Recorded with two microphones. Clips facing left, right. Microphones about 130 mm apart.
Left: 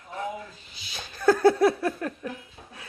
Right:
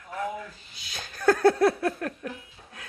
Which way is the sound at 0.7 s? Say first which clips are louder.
Even; centre (ahead or behind).